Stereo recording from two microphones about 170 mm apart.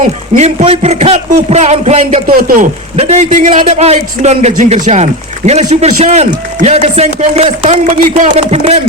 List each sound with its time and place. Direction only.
0.3 s speech: 40° right (ahead or behind)
2.2 s a man's voice: 55° right (ahead or behind)
2.9 s speech: 35° right (ahead or behind)